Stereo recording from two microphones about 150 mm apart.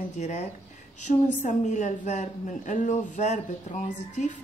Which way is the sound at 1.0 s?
55° left (ahead or behind).